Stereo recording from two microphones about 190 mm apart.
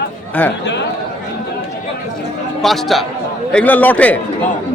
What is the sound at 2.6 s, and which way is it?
A man's voice, centre (ahead or behind).